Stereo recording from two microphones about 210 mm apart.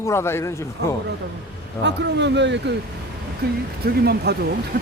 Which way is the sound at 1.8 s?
55° right (ahead or behind).